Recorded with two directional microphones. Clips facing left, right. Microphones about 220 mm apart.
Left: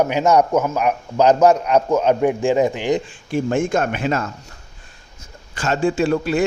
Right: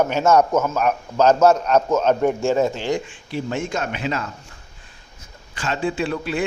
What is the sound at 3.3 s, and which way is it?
Speech, 50° left (ahead or behind).